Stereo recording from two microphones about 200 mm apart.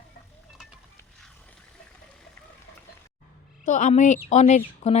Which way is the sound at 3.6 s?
40° left (ahead or behind).